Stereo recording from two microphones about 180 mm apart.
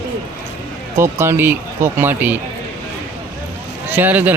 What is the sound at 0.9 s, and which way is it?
Speech, 15° right (ahead or behind).